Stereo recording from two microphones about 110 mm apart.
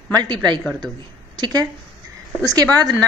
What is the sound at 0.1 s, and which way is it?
A woman's voice, 40° right (ahead or behind).